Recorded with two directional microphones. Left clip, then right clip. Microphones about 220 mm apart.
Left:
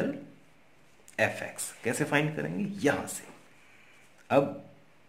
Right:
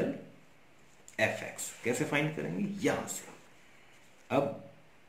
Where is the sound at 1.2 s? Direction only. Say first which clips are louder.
Left 2 dB; 45° left (ahead or behind).